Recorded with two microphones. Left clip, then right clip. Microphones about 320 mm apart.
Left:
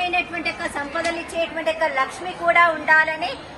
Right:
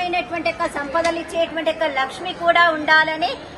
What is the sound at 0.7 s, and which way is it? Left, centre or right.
A woman's voice, centre.